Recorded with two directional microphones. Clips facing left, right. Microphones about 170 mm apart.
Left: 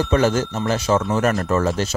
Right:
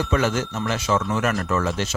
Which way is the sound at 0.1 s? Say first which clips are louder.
Left 4 dB; 35° left (ahead or behind).